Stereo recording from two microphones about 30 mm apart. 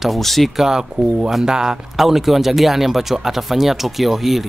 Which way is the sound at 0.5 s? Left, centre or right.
Centre.